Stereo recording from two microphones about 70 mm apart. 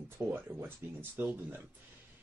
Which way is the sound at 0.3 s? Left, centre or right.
Right.